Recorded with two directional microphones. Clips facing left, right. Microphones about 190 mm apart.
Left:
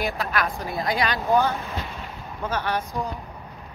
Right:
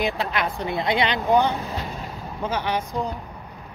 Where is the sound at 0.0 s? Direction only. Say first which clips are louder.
Right 1 dB; 20° right (ahead or behind).